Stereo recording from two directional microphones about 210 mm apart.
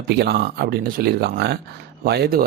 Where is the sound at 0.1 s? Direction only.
50° right (ahead or behind).